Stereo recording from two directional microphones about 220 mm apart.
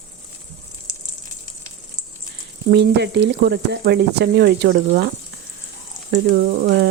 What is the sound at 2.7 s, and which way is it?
Speech, 50° right (ahead or behind).